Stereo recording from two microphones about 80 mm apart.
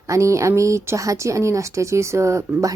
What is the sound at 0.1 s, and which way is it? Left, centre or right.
A woman's voice, right.